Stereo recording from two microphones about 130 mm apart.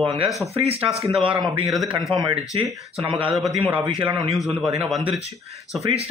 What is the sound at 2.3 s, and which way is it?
Speech, 50° right (ahead or behind).